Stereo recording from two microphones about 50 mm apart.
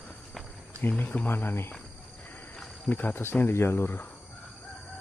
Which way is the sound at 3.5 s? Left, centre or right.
Left.